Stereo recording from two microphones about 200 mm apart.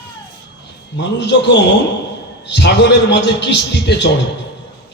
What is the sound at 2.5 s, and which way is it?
A man's voice, 60° left (ahead or behind).